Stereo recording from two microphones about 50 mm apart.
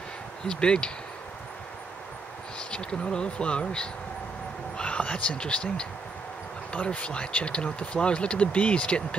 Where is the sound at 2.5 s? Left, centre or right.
Centre.